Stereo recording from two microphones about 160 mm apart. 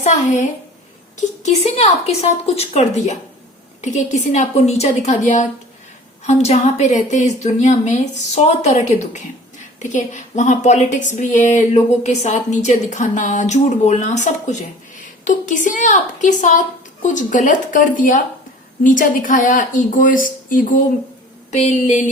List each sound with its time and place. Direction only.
0.0 s a woman's voice: 50° left (ahead or behind)